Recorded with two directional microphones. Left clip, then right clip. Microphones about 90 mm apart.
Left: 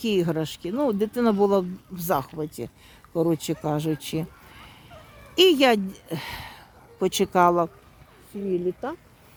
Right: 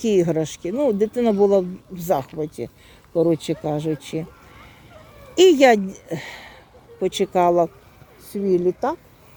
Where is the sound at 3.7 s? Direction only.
45° left (ahead or behind).